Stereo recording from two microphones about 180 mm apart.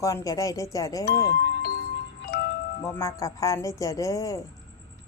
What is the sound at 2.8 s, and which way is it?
Speech, 20° left (ahead or behind).